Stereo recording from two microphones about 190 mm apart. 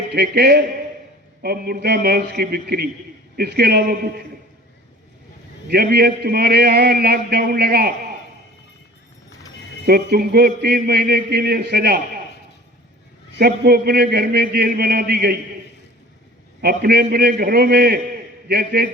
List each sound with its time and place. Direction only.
0.1 s a man's voice: 55° right (ahead or behind)
5.6 s a man's voice: 55° right (ahead or behind)
9.8 s a man's voice: 55° right (ahead or behind)
13.4 s a man's voice: 55° right (ahead or behind)
16.6 s a man's voice: 55° right (ahead or behind)